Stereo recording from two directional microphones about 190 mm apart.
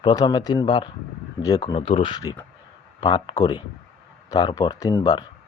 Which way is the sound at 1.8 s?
30° left (ahead or behind).